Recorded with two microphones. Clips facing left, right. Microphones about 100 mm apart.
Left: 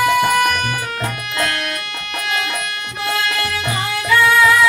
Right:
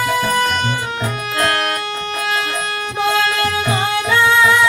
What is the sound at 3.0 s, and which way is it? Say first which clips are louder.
Music: right 5 dB; 30° right (ahead or behind).